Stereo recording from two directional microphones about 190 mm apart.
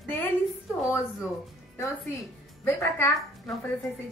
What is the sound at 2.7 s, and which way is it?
Speech, 15° left (ahead or behind).